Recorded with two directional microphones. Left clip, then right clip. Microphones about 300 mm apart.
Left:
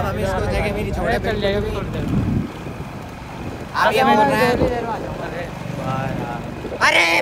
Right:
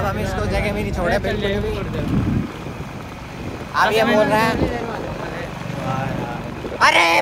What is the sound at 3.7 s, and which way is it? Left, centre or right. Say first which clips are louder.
Speech: left 1 dB; centre.